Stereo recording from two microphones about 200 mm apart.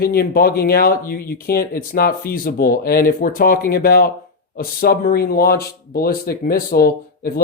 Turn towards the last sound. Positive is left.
turn(degrees=50)  # may be behind; listen again after turning